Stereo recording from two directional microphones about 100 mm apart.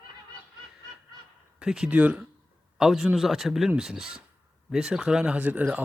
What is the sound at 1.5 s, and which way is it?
Speech, 5° right (ahead or behind).